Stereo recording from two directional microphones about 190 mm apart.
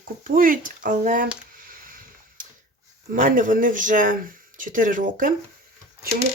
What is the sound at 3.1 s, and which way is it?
Speech, 45° right (ahead or behind).